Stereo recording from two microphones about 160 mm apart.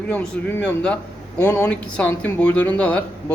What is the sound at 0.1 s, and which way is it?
Speech, 10° left (ahead or behind).